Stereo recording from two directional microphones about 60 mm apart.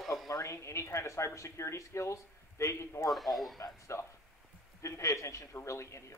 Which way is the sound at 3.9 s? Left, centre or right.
Left.